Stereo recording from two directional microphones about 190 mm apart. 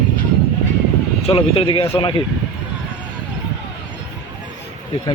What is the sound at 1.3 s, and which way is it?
Speech, 30° left (ahead or behind).